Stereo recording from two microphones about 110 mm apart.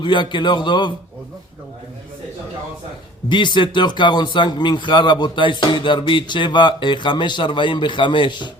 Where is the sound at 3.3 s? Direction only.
45° left (ahead or behind).